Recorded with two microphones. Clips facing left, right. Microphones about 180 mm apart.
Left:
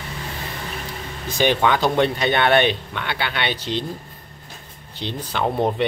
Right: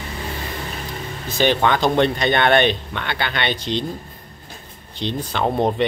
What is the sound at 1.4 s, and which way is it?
Speech, 10° left (ahead or behind).